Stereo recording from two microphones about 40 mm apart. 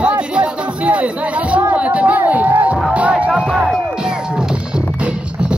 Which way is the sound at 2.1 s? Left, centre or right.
Right.